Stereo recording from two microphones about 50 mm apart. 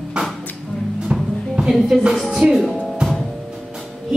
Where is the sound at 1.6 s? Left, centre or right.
Centre.